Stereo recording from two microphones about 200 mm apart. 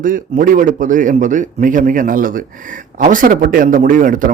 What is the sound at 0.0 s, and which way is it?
A man's voice, 40° right (ahead or behind).